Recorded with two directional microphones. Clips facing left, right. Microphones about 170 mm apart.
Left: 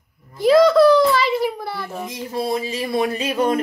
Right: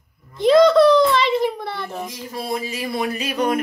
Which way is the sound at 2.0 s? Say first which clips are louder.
Left 4 dB; 25° left (ahead or behind).